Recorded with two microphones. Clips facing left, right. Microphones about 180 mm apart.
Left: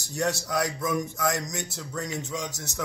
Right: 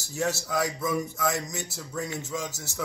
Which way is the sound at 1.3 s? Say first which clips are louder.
Left 1 dB; 65° left (ahead or behind).